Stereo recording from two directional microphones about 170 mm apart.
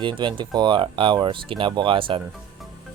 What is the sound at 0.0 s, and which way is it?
Speech, 25° right (ahead or behind).